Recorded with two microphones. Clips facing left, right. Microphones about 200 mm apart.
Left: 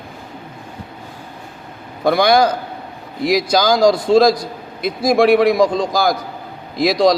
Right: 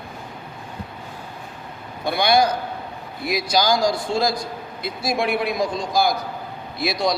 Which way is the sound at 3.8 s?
90° left.